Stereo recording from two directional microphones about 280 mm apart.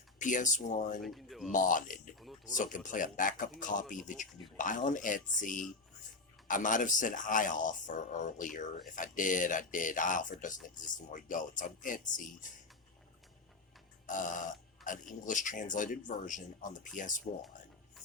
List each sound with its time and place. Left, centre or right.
0.2 s speech: left
1.0 s speech: centre
1.5 s speech: left
2.1 s speech: centre
2.6 s speech: left
14.1 s speech: left